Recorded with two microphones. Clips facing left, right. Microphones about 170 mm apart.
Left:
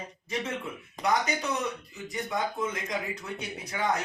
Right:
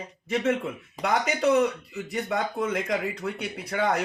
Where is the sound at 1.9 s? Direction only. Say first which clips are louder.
Right 4 dB; 65° right (ahead or behind).